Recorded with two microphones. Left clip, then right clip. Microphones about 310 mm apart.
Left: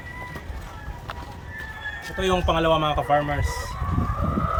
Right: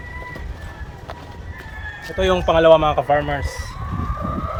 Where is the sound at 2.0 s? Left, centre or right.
Centre.